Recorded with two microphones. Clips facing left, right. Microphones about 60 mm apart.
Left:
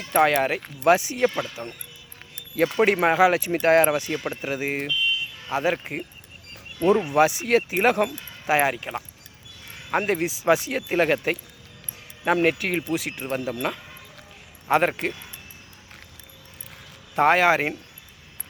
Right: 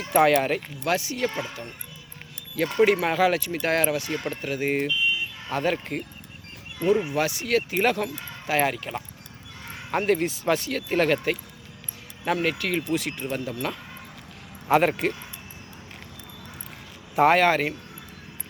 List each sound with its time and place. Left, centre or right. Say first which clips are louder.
0.1 s speech: even; centre
0.3 s speech: even; centre
1.6 s speech: left 3 dB; left
2.7 s speech: left 1 dB; left
4.9 s car alarm: even; right
5.5 s speech: left 2 dB; centre
7.1 s speech: left 5 dB; left
14.7 s speech: right 1 dB; centre
17.2 s speech: even; centre